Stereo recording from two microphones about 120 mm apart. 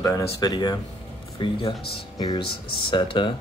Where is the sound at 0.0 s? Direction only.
30° left (ahead or behind).